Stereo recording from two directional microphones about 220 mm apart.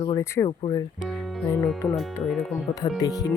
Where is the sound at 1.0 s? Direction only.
Centre (ahead or behind).